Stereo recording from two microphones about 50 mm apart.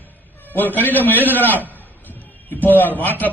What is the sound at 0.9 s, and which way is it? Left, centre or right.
Speech, left.